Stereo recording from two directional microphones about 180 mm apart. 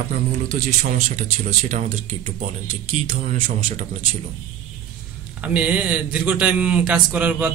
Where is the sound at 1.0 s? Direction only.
40° right (ahead or behind).